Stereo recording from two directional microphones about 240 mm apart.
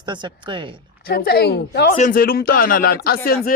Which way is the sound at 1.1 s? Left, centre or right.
Left.